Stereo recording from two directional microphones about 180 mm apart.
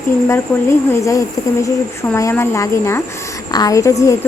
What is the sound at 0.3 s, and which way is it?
Speech, 15° left (ahead or behind).